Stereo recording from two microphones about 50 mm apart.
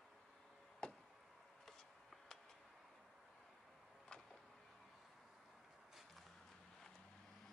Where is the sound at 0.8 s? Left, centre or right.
Centre.